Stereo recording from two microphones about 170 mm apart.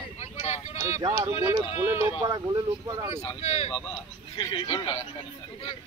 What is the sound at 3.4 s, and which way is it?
Speech, 40° left (ahead or behind).